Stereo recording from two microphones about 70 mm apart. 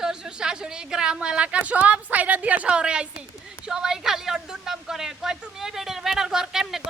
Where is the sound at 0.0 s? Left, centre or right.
Centre.